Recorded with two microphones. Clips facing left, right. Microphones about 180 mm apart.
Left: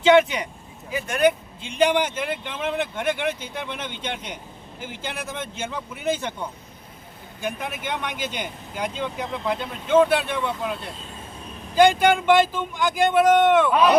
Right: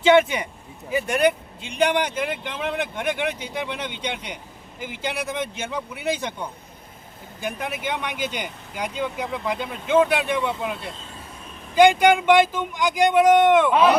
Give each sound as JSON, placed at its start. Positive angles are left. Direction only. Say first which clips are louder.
{"t": 0.0, "sound": "speech", "louder": "even", "side_deg": -5}
{"t": 7.4, "sound": "speech", "louder": "right 1 dB", "side_deg": -10}
{"t": 11.8, "sound": "speech", "louder": "right 2 dB", "side_deg": -15}